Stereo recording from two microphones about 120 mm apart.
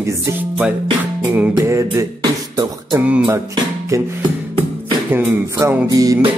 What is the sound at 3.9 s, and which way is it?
Music, 25° right (ahead or behind).